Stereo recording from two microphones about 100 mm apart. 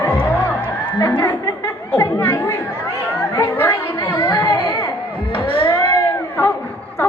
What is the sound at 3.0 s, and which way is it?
Children playing, 25° left (ahead or behind).